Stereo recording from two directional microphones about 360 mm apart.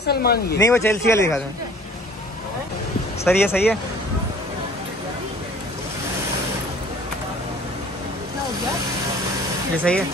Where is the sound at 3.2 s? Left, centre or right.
Centre.